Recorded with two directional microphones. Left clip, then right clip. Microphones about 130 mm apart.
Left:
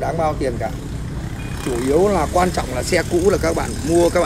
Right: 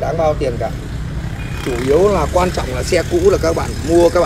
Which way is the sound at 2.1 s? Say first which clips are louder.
Right 2 dB; 25° right (ahead or behind).